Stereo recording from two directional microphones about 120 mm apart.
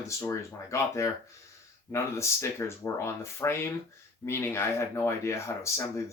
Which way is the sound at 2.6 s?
20° left (ahead or behind).